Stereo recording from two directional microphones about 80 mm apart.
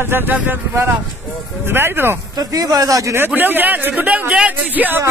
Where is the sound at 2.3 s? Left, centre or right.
Right.